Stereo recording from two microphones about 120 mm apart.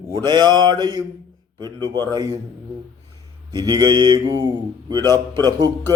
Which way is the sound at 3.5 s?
35° right (ahead or behind).